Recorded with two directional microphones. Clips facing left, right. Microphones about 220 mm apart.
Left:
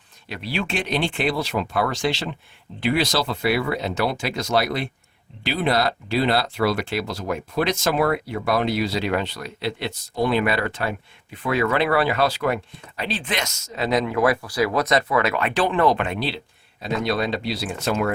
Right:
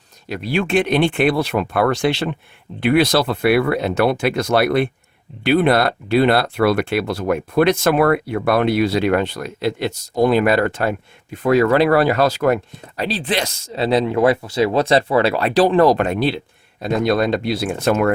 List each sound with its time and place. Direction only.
0.3 s speech: 50° right (ahead or behind)